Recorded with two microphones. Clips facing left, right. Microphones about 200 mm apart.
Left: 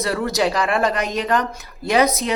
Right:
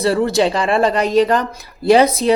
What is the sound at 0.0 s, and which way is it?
Speech, 30° right (ahead or behind).